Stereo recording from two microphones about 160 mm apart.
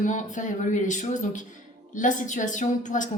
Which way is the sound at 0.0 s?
50° left (ahead or behind).